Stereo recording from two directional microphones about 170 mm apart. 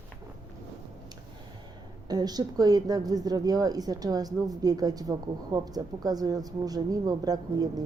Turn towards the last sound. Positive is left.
turn(degrees=-20)  # may be behind; listen again after turning